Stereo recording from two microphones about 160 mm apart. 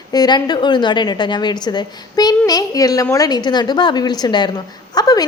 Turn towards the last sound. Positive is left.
turn(degrees=25)  # may be behind; listen again after turning